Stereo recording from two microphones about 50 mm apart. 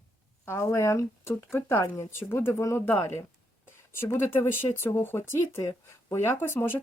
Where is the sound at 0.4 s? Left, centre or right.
Left.